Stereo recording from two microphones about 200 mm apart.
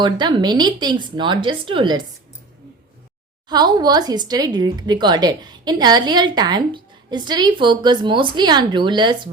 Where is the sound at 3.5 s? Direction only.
20° right (ahead or behind).